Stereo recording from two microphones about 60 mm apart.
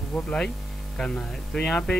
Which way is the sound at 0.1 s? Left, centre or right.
Centre.